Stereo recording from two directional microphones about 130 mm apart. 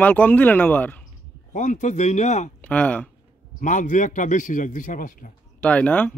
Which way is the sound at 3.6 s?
75° left (ahead or behind).